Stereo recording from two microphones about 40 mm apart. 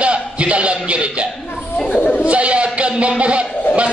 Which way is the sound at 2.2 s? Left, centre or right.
Right.